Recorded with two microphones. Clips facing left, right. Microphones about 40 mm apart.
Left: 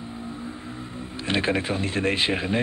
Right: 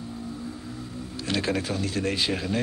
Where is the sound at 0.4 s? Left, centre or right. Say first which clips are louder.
Left 1 dB; left.